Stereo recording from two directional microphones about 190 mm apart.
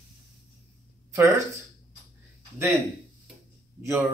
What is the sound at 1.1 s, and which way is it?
Speech, 15° right (ahead or behind).